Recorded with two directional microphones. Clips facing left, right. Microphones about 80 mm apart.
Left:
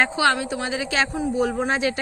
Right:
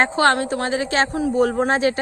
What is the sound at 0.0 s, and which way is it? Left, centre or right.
Speech, right.